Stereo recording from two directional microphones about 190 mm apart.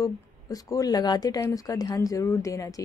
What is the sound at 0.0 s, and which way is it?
Speech, 20° left (ahead or behind).